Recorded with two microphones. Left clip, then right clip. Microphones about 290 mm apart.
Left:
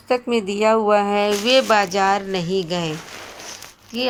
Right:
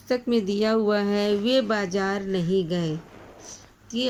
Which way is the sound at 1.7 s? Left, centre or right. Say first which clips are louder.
Left 9 dB; centre.